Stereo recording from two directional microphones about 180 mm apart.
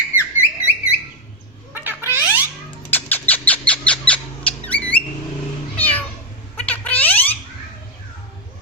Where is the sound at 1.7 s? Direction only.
15° right (ahead or behind).